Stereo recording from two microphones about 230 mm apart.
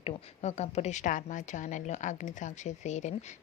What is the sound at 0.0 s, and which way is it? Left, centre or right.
Speech, left.